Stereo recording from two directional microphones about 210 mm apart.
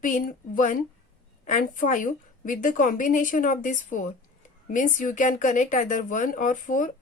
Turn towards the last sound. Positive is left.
turn(degrees=40)  # may be behind; listen again after turning